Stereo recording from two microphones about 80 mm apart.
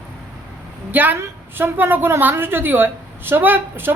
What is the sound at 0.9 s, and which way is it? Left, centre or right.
Speech, right.